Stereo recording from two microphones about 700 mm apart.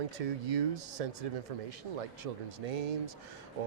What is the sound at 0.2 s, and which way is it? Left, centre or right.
Speech, right.